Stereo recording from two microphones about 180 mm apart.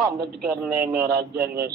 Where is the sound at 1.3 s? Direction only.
60° right (ahead or behind).